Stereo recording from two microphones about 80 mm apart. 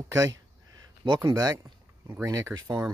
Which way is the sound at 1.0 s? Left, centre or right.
Right.